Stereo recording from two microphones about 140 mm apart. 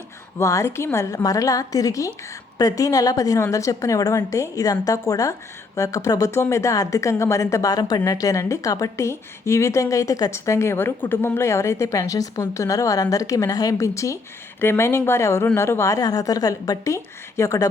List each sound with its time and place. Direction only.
0.3 s a woman's voice: 20° left (ahead or behind)